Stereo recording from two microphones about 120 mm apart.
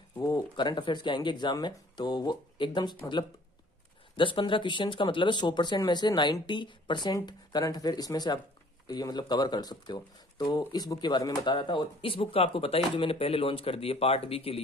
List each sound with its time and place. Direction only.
0.2 s speech: 35° left (ahead or behind)
4.2 s speech: 45° left (ahead or behind)